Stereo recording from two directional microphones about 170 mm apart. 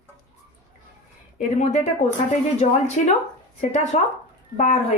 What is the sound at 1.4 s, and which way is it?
Speech, 45° left (ahead or behind).